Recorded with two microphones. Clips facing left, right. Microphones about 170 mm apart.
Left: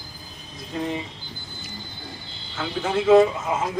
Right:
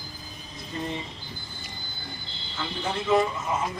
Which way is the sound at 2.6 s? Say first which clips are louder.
Left 7 dB; 90° left.